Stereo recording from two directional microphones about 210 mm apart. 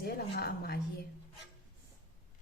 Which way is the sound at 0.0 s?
50° left (ahead or behind).